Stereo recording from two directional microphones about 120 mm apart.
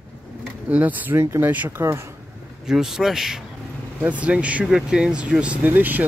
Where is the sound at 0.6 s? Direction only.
15° right (ahead or behind).